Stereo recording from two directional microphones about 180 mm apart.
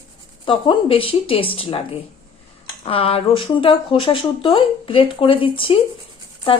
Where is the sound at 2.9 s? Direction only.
30° left (ahead or behind).